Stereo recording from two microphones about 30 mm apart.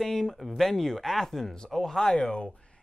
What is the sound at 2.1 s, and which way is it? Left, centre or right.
Speech, left.